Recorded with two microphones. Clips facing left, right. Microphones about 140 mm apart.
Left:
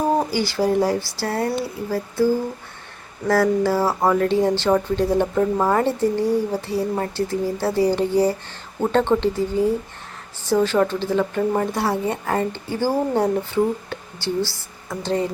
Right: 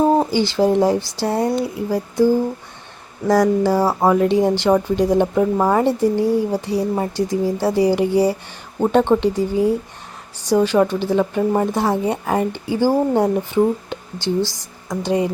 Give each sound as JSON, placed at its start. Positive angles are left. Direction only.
{"t": 0.0, "sound": "speech", "side_deg": -20}
{"t": 3.2, "sound": "speech", "side_deg": -15}